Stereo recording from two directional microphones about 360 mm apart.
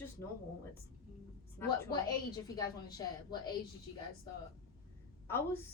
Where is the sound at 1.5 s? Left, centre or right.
Centre.